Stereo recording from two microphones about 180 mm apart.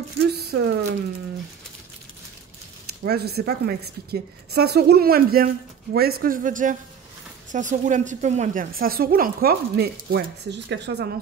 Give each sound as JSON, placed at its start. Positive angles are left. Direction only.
{"t": 0.3, "sound": "a sound", "side_deg": -65}
{"t": 3.0, "sound": "a woman's voice", "side_deg": -65}
{"t": 8.7, "sound": "a woman's voice", "side_deg": -55}
{"t": 10.1, "sound": "speech", "side_deg": -70}